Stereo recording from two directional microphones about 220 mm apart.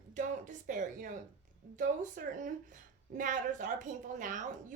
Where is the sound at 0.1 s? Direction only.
35° right (ahead or behind).